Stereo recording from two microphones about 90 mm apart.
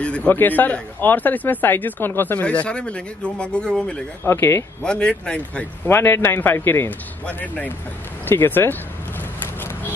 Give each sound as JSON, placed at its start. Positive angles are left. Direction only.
{"t": 0.0, "sound": "speech", "side_deg": 15}
{"t": 4.2, "sound": "speech", "side_deg": 30}
{"t": 4.8, "sound": "speech", "side_deg": 10}
{"t": 5.9, "sound": "speech", "side_deg": 25}